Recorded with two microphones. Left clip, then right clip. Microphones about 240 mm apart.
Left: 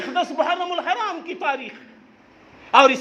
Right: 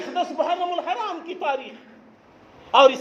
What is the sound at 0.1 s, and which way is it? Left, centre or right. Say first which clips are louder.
A man's voice: left 2 dB; left.